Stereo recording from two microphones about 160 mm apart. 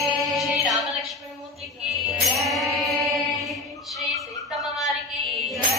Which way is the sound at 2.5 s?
Centre (ahead or behind).